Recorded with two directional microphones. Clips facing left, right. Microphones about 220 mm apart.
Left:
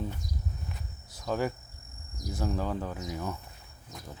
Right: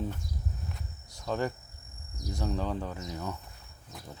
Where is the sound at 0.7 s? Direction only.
5° left (ahead or behind).